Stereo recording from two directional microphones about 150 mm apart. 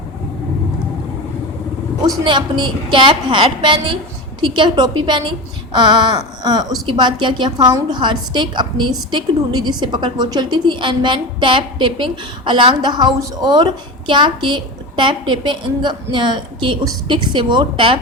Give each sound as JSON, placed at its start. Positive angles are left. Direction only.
{"t": 2.0, "sound": "a woman's voice", "side_deg": -30}